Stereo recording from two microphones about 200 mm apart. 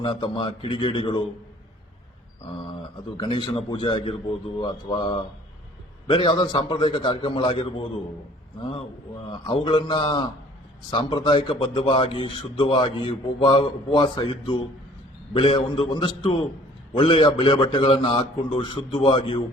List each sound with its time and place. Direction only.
0.0 s a man's voice: 25° left (ahead or behind)
3.2 s a man's voice: 25° left (ahead or behind)
9.3 s a man's voice: 25° left (ahead or behind)